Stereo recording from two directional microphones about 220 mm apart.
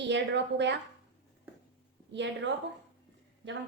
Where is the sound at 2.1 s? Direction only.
55° right (ahead or behind).